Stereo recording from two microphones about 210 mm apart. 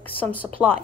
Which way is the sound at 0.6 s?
5° right (ahead or behind).